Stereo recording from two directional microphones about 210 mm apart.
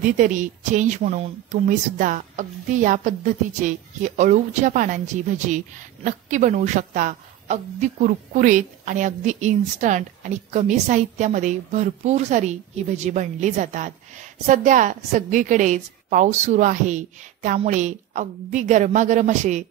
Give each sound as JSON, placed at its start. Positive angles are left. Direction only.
{"t": 0.0, "sound": "a woman's voice", "side_deg": -40}
{"t": 6.0, "sound": "a woman's voice", "side_deg": -35}